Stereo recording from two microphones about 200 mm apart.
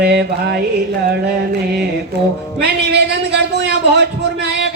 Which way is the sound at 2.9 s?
55° right (ahead or behind).